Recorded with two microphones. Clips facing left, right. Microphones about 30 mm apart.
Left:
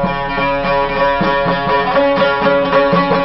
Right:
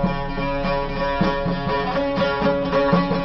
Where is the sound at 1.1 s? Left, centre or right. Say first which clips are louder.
Left 8 dB; left.